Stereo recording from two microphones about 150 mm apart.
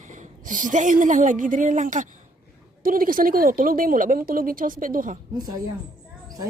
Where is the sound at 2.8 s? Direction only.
70° right (ahead or behind).